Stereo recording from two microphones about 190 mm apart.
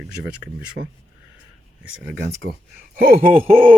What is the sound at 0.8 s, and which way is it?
Speech, 50° right (ahead or behind).